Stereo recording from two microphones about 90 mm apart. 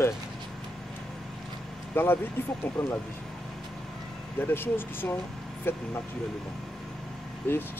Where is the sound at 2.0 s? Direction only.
25° left (ahead or behind).